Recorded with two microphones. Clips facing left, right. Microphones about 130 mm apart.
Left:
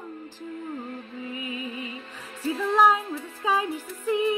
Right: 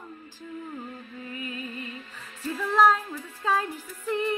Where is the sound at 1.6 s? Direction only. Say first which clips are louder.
Left 3 dB; 70° left (ahead or behind).